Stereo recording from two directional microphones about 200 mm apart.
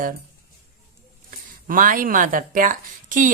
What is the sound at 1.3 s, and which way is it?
Speech, 45° right (ahead or behind).